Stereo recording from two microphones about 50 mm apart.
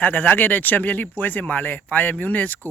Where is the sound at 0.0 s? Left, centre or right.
Left.